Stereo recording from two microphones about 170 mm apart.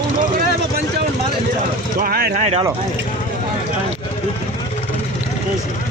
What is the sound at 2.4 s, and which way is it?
Speech, 40° right (ahead or behind).